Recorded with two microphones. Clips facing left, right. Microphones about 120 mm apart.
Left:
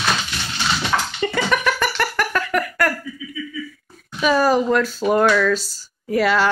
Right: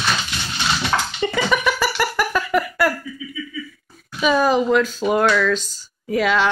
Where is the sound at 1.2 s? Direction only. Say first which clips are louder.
Right 1 dB; 5° right (ahead or behind).